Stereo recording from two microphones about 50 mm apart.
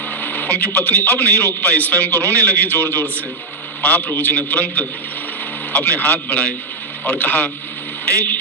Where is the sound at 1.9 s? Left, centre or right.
Right.